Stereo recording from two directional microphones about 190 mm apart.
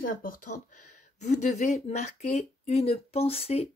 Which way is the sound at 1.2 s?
35° left (ahead or behind).